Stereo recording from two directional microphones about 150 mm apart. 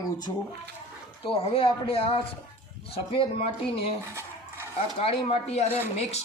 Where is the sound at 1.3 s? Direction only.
40° left (ahead or behind).